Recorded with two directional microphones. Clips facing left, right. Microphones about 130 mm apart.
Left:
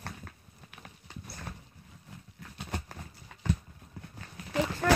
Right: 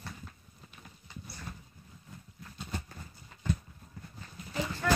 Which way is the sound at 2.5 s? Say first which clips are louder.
Left 2 dB; 75° left (ahead or behind).